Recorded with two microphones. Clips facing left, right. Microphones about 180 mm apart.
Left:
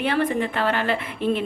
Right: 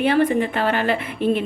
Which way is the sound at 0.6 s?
10° right (ahead or behind).